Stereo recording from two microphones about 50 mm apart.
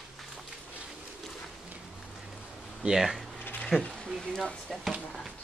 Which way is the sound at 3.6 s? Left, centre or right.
Centre.